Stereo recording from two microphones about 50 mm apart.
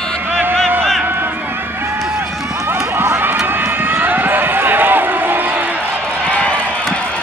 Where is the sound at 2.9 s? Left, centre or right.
Right.